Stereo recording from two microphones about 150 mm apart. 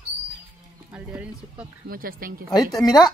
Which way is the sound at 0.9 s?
10° right (ahead or behind).